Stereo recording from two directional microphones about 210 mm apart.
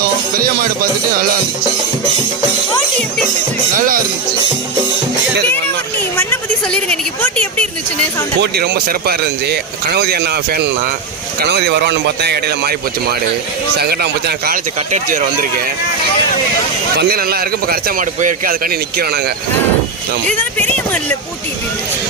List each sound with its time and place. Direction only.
0.3 s music: 45° right (ahead or behind)
3.8 s speech: 40° right (ahead or behind)
6.1 s a woman's voice: 10° left (ahead or behind)
8.4 s speech: 50° right (ahead or behind)
14.8 s speech: 35° right (ahead or behind)
17.0 s speech: 45° right (ahead or behind)
20.2 s speech: 5° left (ahead or behind)